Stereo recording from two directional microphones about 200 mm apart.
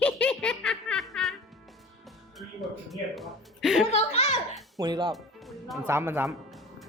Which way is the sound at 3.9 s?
30° left (ahead or behind).